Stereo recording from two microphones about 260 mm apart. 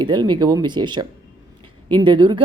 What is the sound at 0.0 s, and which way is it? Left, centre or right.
Speech, centre.